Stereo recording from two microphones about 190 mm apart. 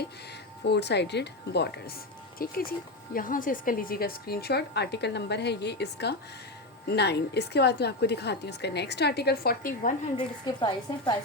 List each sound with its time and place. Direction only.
0.6 s speech: 65° left (ahead or behind)
2.4 s speech: 50° left (ahead or behind)
10.2 s a woman's voice: 25° left (ahead or behind)